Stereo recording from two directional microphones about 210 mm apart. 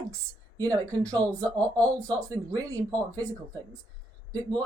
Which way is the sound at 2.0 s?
15° right (ahead or behind).